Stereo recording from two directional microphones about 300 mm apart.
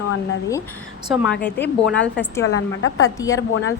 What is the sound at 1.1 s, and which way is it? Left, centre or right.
A woman's voice, centre.